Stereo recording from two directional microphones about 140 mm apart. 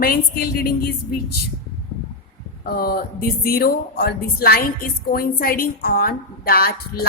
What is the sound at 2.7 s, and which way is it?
Speech, 90° left.